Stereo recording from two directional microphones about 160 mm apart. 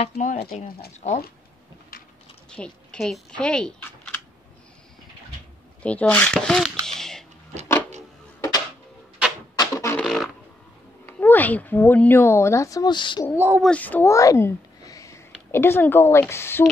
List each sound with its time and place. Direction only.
0.0 s speech: 50° left (ahead or behind)
2.5 s speech: 5° left (ahead or behind)
5.8 s speech: 10° left (ahead or behind)
6.9 s a sound: 5° left (ahead or behind)
8.4 s music: 25° left (ahead or behind)
9.6 s fart: 20° left (ahead or behind)
9.9 s a sound: centre (ahead or behind)
11.1 s speech: 10° left (ahead or behind); by 13.3 s 30° left (ahead or behind)
13.6 s speech: 10° left (ahead or behind)